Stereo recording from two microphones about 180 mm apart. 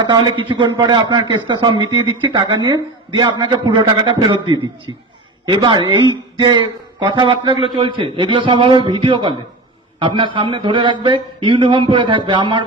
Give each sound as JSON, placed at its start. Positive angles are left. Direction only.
{"t": 0.0, "sound": "speech", "side_deg": -25}